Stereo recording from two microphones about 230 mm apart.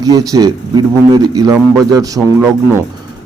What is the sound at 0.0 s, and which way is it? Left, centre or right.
A man's voice, centre.